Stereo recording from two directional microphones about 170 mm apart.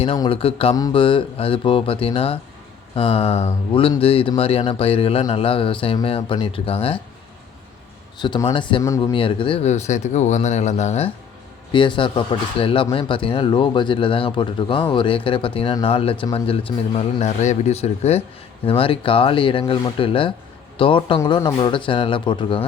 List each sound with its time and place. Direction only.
0.2 s speech: 35° left (ahead or behind)
8.2 s speech: 25° left (ahead or behind); by 11.1 s 40° left (ahead or behind)
11.7 s speech: 30° left (ahead or behind)